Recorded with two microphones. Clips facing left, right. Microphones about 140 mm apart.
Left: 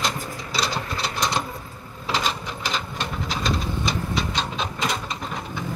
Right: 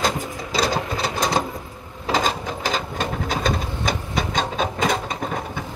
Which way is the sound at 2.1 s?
45° right (ahead or behind).